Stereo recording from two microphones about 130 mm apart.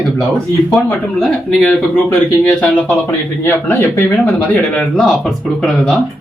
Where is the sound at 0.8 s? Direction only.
Centre (ahead or behind).